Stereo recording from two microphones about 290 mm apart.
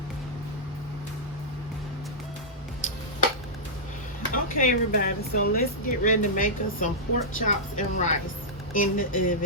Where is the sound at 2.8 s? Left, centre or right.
Left.